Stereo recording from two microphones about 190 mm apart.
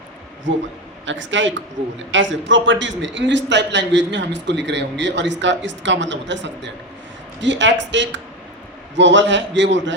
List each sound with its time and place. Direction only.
0.5 s a man's voice: 75° right (ahead or behind)